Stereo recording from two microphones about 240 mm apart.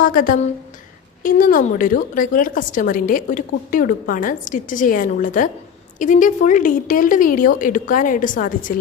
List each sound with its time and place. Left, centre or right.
0.0 s a woman's voice: left